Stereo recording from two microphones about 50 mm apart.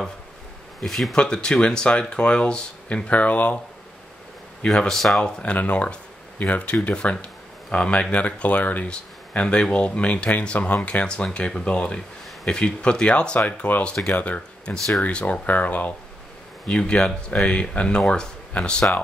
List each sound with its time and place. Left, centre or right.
0.8 s speech: centre
1.1 s speech: centre
3.1 s speech: left
4.6 s speech: centre
5.2 s speech: left
16.6 s speech: centre